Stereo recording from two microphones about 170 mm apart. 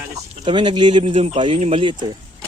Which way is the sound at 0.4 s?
30° right (ahead or behind).